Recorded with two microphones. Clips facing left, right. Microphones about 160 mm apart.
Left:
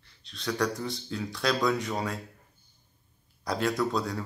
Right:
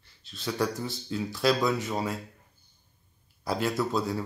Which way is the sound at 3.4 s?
5° right (ahead or behind).